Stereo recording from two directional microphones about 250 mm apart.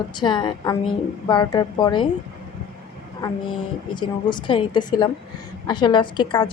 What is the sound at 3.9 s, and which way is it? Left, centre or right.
A woman's voice, centre.